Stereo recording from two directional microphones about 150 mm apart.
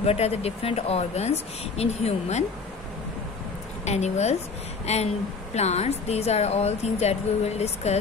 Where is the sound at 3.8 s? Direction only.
50° left (ahead or behind).